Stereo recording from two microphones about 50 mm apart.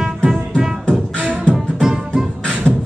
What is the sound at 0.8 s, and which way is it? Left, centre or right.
Beatboxing, left.